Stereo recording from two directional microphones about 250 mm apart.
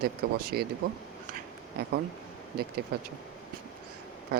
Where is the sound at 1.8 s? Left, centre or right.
Right.